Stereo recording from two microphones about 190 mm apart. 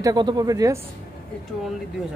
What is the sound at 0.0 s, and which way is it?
Speech, 20° right (ahead or behind).